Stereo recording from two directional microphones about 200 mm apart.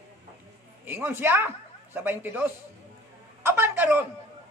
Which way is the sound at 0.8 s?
10° right (ahead or behind).